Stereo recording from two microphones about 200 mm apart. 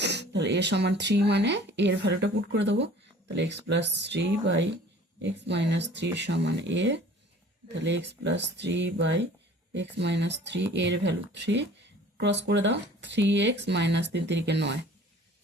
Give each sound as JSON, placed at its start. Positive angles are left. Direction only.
{"t": 0.0, "sound": "speech", "side_deg": -60}